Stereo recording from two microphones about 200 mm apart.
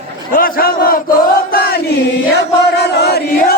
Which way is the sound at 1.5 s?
50° left (ahead or behind).